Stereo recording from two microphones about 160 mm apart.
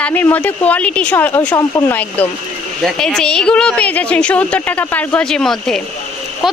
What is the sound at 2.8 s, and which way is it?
Speech, 5° left (ahead or behind).